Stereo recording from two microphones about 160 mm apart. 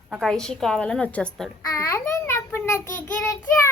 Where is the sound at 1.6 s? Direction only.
20° left (ahead or behind).